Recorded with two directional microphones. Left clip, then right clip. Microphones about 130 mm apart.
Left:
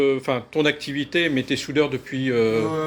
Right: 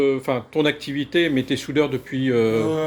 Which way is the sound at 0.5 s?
15° right (ahead or behind).